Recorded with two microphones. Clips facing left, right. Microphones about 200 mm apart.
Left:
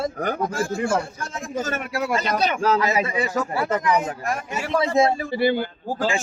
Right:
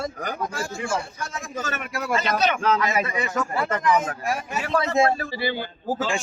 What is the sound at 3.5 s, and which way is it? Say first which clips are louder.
A man's voice: right 1 dB; 10° left (ahead or behind).